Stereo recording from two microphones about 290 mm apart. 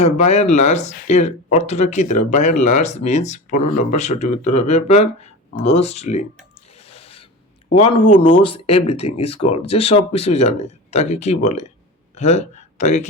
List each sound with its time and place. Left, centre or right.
0.0 s speech: left
6.9 s a sound: centre
7.8 s speech: centre